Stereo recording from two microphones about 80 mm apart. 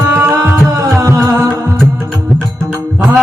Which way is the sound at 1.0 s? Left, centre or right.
Right.